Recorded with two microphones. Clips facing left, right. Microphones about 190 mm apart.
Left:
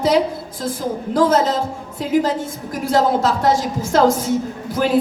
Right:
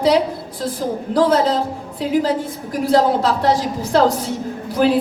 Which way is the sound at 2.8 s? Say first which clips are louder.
Right 1 dB; 45° left (ahead or behind).